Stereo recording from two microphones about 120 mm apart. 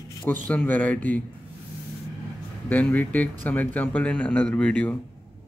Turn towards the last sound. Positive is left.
turn(degrees=10)  # may be behind; listen again after turning